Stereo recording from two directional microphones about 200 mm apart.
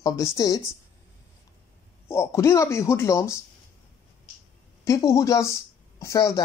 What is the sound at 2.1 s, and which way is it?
Speech, 15° left (ahead or behind).